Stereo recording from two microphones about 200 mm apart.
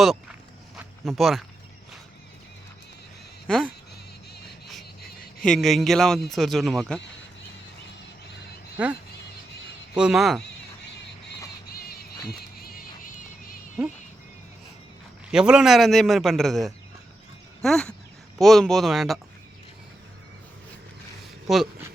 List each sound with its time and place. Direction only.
0.8 s a sound: centre (ahead or behind)
3.4 s speech: centre (ahead or behind)
5.4 s a man's voice: centre (ahead or behind)
8.8 s a man's voice: 5° right (ahead or behind)
11.7 s a sound: 50° left (ahead or behind)
15.3 s a man's voice: 5° right (ahead or behind)
21.5 s a man's voice: centre (ahead or behind)